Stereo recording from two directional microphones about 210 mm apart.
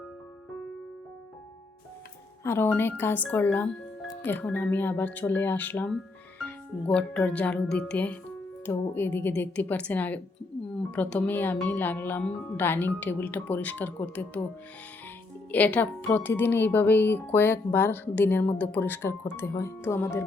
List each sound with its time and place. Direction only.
2.4 s speech: 10° left (ahead or behind)
15.5 s speech: 10° left (ahead or behind)